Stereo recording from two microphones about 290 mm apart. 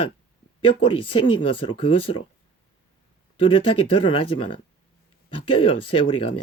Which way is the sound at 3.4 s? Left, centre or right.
Centre.